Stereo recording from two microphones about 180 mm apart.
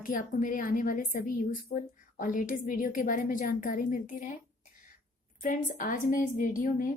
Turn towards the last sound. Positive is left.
turn(degrees=50)  # may be behind; listen again after turning